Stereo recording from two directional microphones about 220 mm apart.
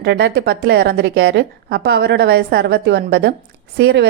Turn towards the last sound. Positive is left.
turn(degrees=-50)  # may be behind; listen again after turning